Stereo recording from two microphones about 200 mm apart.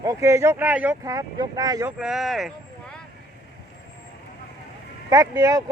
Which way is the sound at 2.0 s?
Centre (ahead or behind).